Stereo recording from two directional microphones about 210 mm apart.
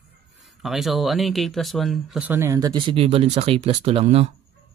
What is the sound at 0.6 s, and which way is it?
Speech, centre (ahead or behind).